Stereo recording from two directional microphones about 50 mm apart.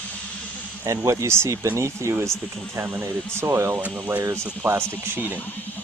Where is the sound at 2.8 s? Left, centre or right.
Right.